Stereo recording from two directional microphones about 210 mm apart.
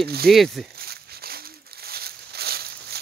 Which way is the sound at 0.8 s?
45° right (ahead or behind).